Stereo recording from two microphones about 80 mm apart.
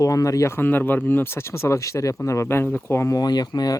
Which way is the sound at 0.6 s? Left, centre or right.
Left.